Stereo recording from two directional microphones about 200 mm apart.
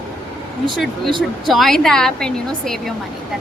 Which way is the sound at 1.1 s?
25° right (ahead or behind).